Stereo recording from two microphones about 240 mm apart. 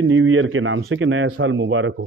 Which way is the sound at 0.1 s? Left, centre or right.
Right.